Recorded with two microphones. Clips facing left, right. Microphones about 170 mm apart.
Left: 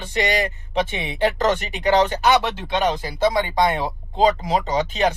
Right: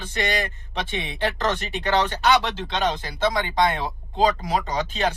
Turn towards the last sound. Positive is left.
turn(degrees=15)  # may be behind; listen again after turning